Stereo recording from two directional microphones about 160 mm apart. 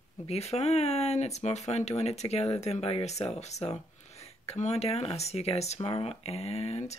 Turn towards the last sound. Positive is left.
turn(degrees=45)  # may be behind; listen again after turning